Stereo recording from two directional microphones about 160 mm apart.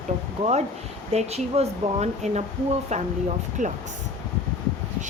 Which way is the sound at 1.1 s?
40° right (ahead or behind).